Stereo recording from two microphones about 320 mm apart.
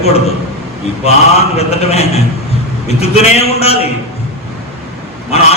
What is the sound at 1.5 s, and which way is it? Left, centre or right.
A man's voice, centre.